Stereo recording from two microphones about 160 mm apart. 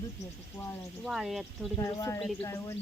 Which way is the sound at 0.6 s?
25° left (ahead or behind).